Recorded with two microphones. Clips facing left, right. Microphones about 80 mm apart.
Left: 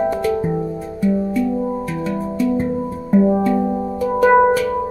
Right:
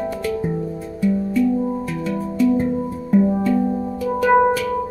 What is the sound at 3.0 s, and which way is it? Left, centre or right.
Music, centre.